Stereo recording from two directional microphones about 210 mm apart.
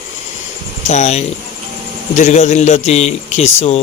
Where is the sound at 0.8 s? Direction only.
35° left (ahead or behind).